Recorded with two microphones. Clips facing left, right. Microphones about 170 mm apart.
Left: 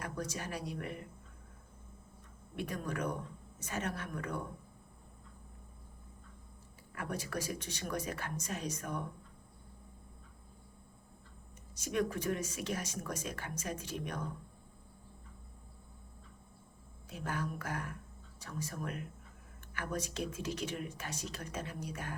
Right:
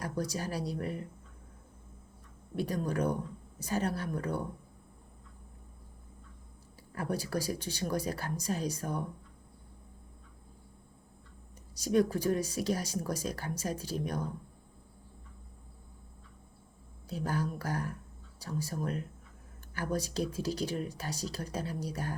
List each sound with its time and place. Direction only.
0.0 s speech: 35° right (ahead or behind)
2.6 s speech: 35° right (ahead or behind)
6.9 s speech: 35° right (ahead or behind)
11.7 s speech: 35° right (ahead or behind)
17.1 s speech: 35° right (ahead or behind)